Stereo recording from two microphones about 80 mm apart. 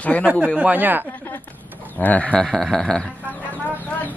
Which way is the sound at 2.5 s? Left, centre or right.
Centre.